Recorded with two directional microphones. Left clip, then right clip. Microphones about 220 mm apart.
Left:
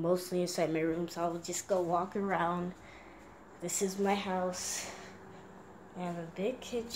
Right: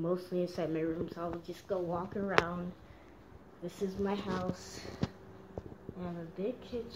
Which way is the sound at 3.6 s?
15° left (ahead or behind).